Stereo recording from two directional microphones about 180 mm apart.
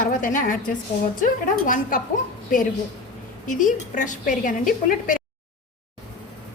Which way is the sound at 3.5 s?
45° left (ahead or behind).